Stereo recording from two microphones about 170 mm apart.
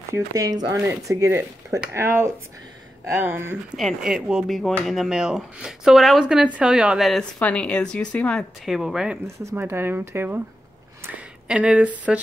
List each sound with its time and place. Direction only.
0.1 s speech: 20° right (ahead or behind)
3.7 s speech: centre (ahead or behind)
9.5 s speech: 15° right (ahead or behind)
11.4 s speech: 5° right (ahead or behind)